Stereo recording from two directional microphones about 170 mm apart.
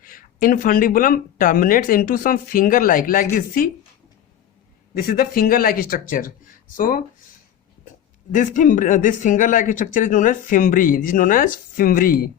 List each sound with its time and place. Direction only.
0.0 s speech: 55° left (ahead or behind)
4.9 s speech: 60° left (ahead or behind)
8.3 s speech: 50° left (ahead or behind)